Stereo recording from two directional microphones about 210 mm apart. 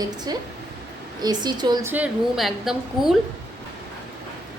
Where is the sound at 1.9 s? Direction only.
5° right (ahead or behind).